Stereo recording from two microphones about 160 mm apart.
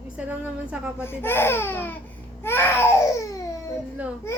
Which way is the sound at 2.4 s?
15° left (ahead or behind).